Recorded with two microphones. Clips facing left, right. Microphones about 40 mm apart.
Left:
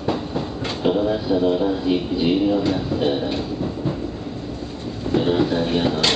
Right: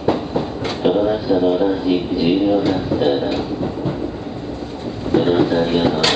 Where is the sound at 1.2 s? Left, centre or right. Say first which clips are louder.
Right 3 dB; centre.